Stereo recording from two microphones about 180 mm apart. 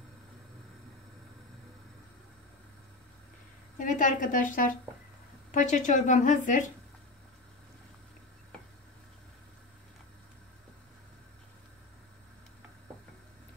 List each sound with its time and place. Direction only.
3.7 s a woman's voice: 45° left (ahead or behind)